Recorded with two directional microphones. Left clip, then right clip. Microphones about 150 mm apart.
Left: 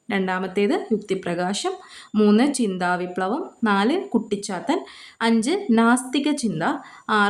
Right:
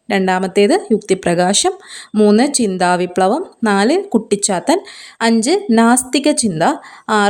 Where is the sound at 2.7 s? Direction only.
50° right (ahead or behind).